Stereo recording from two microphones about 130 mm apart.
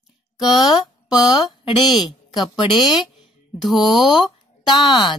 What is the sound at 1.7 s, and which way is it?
Speech, 35° left (ahead or behind).